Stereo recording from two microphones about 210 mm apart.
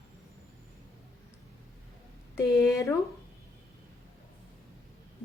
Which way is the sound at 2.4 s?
15° left (ahead or behind).